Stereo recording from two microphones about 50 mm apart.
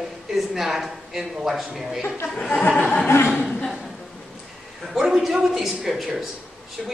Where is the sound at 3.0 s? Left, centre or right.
Left.